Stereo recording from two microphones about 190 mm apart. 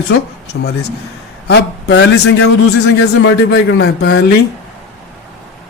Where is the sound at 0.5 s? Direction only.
90° left.